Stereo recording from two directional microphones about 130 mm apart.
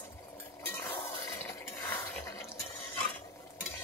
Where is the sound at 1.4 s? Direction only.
15° left (ahead or behind).